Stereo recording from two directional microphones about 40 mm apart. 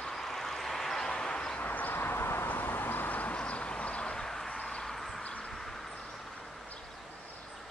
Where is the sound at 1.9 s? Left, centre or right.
Left.